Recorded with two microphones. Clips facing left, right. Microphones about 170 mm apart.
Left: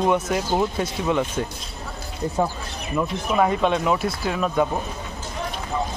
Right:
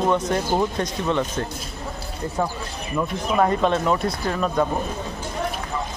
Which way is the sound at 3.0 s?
5° left (ahead or behind).